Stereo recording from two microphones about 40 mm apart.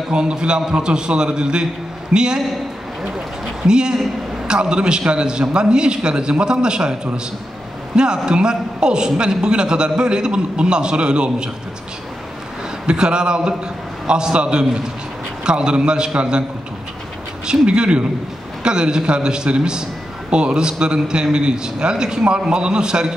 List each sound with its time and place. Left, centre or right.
0.1 s a man's voice: right
12.8 s a man's voice: right
17.5 s a man's voice: right